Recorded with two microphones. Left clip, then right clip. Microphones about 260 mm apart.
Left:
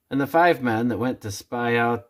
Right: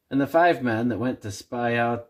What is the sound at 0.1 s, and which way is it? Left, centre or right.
Speech, left.